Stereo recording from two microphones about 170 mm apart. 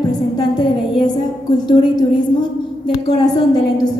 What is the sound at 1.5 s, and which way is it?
A woman's voice, 25° left (ahead or behind).